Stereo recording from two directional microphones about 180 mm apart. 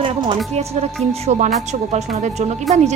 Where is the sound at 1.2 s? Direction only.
40° right (ahead or behind).